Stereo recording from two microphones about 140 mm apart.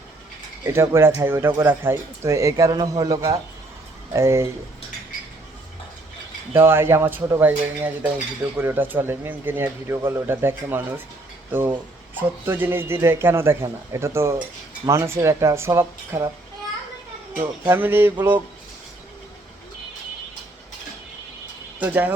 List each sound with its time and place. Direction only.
0.6 s speech: 20° right (ahead or behind)
6.5 s a man's voice: 15° right (ahead or behind)
12.5 s a man's voice: 15° right (ahead or behind)
17.7 s a man's voice: 15° right (ahead or behind)
21.8 s speech: 10° right (ahead or behind)